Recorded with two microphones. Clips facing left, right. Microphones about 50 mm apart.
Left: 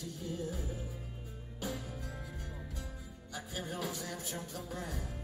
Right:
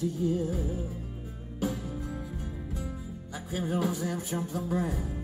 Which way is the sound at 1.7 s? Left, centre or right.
Centre.